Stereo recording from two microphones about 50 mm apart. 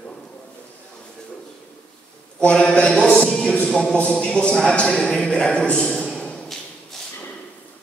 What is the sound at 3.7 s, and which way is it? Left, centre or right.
A man's voice, left.